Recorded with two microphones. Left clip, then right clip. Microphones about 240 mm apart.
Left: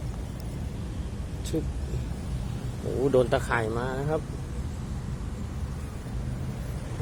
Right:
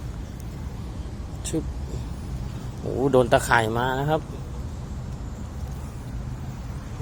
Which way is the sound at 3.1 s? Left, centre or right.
Centre.